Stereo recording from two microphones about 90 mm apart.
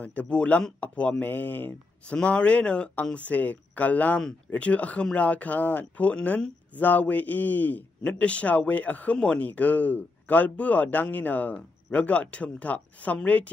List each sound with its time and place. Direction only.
0.0 s a man's voice: 15° left (ahead or behind)